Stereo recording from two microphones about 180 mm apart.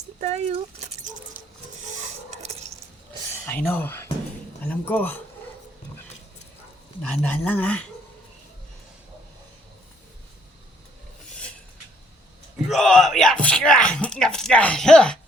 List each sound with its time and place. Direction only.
0.2 s speech: 40° right (ahead or behind)
2.0 s a sound: 40° right (ahead or behind)
3.4 s speech: 10° left (ahead or behind)
7.2 s speech: 10° left (ahead or behind)
12.6 s speech: centre (ahead or behind)